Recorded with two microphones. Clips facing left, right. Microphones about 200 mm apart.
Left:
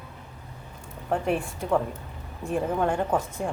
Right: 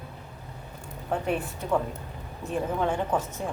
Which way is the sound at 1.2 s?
Centre (ahead or behind).